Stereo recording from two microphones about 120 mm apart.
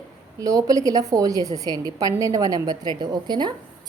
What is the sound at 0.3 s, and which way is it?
A woman's voice, 30° right (ahead or behind).